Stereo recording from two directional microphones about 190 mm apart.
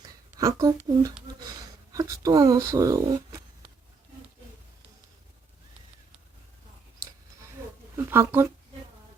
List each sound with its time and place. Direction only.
0.0 s a sound: 20° right (ahead or behind)
1.4 s speech: 20° right (ahead or behind)
7.9 s speech: 15° right (ahead or behind)